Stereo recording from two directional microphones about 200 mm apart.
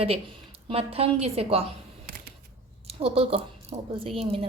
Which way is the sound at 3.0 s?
30° right (ahead or behind).